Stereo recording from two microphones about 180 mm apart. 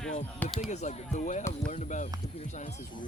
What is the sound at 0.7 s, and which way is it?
Speech, 40° left (ahead or behind).